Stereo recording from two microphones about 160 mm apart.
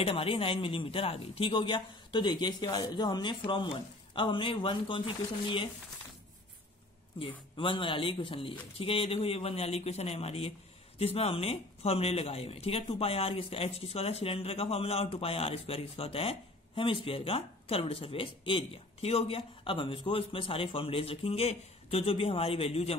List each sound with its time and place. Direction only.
0.0 s speech: 35° left (ahead or behind)
7.2 s speech: 35° left (ahead or behind)